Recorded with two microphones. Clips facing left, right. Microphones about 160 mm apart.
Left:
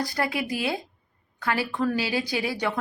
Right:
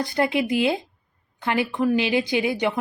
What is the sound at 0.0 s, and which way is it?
Speech, 25° right (ahead or behind).